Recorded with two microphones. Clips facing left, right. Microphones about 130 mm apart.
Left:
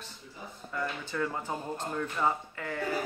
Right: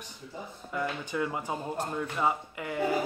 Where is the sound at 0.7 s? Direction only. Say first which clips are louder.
Right 2 dB; 15° right (ahead or behind).